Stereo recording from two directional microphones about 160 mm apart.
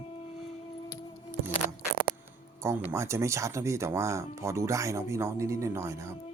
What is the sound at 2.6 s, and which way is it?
Speech, 15° right (ahead or behind).